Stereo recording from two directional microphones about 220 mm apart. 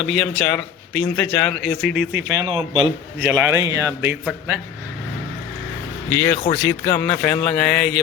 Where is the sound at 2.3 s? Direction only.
20° right (ahead or behind).